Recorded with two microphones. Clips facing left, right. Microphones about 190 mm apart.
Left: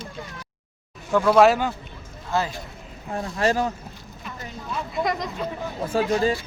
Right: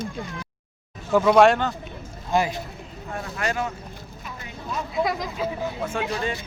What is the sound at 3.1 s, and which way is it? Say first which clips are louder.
Speech: left 5 dB; 30° left (ahead or behind).